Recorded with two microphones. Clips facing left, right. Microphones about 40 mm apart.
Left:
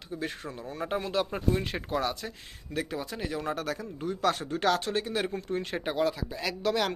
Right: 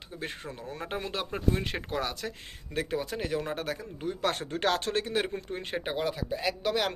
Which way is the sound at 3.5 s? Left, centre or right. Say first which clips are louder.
Left 1 dB; right.